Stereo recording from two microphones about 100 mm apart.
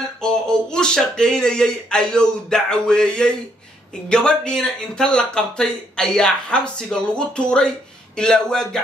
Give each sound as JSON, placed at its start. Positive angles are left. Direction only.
{"t": 0.2, "sound": "a man's voice", "side_deg": 5}